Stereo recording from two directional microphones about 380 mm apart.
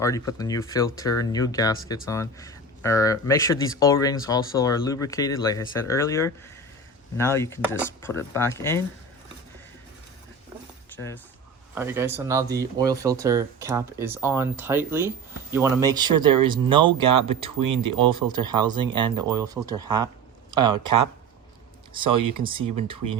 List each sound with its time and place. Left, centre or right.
0.0 s speech: centre
10.9 s speech: centre
11.7 s speech: centre
22.1 s speech: right
22.4 s speech: centre